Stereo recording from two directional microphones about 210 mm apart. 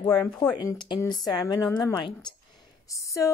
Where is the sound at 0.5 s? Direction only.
20° left (ahead or behind).